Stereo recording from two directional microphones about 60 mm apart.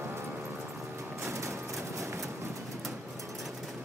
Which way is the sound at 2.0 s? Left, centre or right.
Right.